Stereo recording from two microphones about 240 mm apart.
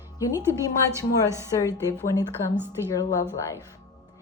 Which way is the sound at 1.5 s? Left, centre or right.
Centre.